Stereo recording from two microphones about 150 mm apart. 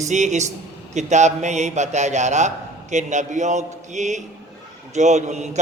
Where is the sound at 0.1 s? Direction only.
50° right (ahead or behind).